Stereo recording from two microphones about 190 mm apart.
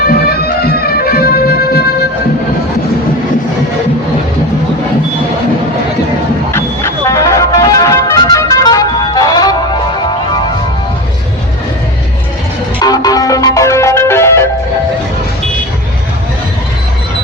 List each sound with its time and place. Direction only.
0.0 s music: 55° left (ahead or behind)
6.5 s music: 15° left (ahead or behind)
12.8 s music: 20° left (ahead or behind)